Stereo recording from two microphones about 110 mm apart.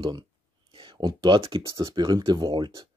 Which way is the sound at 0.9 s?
40° right (ahead or behind).